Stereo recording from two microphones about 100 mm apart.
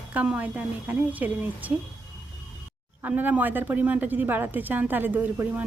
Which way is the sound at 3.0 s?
20° right (ahead or behind).